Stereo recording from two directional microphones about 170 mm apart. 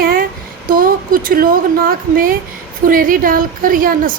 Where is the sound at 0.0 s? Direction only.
55° right (ahead or behind).